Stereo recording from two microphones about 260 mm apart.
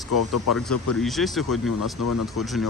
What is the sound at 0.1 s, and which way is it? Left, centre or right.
Speech, left.